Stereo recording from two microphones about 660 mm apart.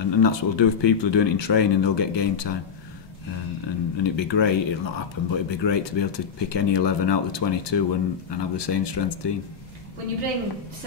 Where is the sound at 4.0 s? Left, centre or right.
Left.